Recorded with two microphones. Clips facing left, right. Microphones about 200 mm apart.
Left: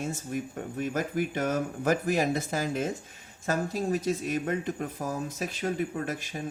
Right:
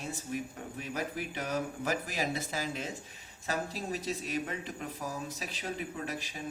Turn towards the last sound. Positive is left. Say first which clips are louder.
# left 5 dB
turn(degrees=45)  # may be behind; listen again after turning